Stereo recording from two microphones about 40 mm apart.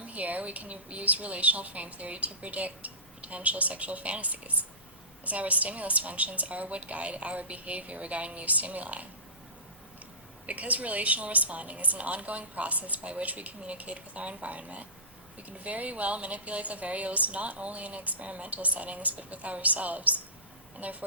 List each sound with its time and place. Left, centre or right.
0.0 s a woman's voice: right
10.4 s a woman's voice: right